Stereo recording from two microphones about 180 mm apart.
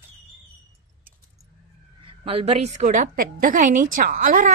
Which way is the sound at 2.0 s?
30° right (ahead or behind).